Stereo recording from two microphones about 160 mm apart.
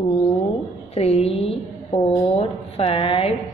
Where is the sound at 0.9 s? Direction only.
40° left (ahead or behind).